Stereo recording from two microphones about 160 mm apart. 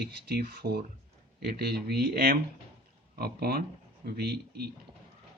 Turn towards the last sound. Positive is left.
turn(degrees=-80)